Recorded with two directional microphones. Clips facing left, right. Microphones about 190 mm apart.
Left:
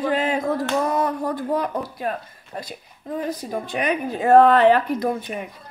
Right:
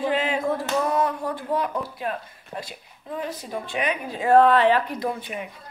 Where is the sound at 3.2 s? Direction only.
40° left (ahead or behind).